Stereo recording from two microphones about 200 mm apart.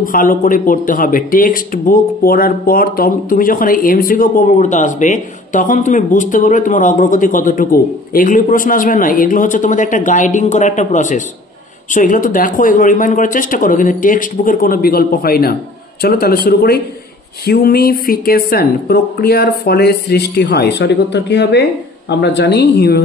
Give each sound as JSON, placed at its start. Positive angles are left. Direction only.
{"t": 0.0, "sound": "speech", "side_deg": 45}